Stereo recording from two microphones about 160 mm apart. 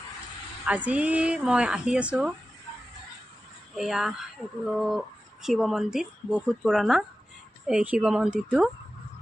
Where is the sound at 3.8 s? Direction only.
Centre (ahead or behind).